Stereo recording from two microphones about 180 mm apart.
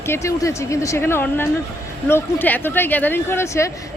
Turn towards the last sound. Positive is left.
turn(degrees=15)  # may be behind; listen again after turning